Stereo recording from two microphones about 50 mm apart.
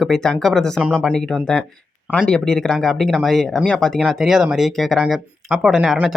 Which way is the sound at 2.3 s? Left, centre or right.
Centre.